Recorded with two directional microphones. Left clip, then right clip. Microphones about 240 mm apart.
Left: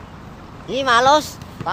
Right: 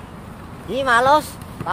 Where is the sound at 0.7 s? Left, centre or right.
Left.